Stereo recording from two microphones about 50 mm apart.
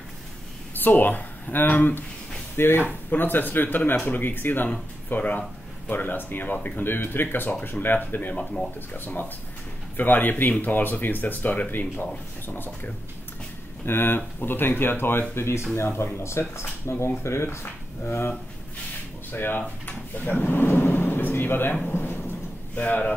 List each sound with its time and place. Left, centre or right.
0.7 s speech: left
19.3 s speech: left
21.8 s a sound: left
22.8 s speech: left